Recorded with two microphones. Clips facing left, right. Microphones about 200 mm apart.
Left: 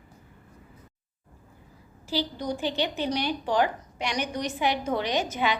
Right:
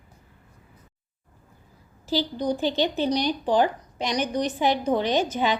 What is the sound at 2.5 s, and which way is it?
A woman's voice, 35° right (ahead or behind).